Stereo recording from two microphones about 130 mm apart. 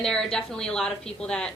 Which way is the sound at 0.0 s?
5° left (ahead or behind).